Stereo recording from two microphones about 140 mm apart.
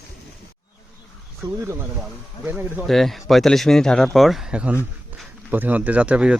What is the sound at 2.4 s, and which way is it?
Speech, 15° right (ahead or behind).